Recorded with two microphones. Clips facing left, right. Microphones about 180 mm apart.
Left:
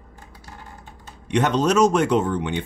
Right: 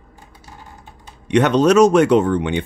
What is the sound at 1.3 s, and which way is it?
Speech, 70° right (ahead or behind).